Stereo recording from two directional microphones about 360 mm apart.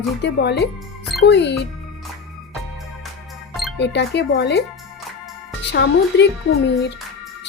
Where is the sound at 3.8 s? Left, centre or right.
Left.